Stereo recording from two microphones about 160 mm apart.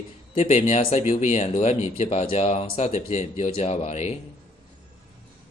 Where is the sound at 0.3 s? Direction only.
40° left (ahead or behind).